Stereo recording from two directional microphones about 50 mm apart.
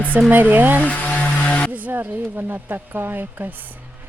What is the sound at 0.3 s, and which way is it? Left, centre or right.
Speech, right.